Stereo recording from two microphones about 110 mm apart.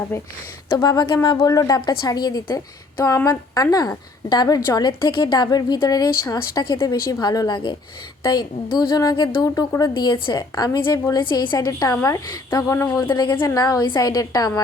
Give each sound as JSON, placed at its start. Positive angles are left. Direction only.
{"t": 0.1, "sound": "a woman's voice", "side_deg": 25}
{"t": 0.8, "sound": "a woman's voice", "side_deg": 40}
{"t": 13.1, "sound": "a woman's voice", "side_deg": 45}
{"t": 13.5, "sound": "a woman's voice", "side_deg": 35}